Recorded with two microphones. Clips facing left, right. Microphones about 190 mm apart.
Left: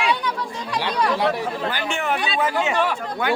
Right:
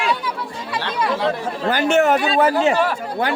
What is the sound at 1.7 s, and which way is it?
Speech, 45° right (ahead or behind).